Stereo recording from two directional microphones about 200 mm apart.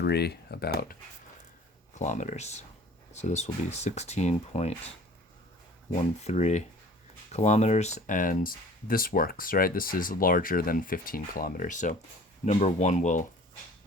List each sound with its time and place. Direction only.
0.0 s speech: 55° left (ahead or behind)
2.0 s speech: 35° left (ahead or behind)
5.9 s speech: 30° left (ahead or behind)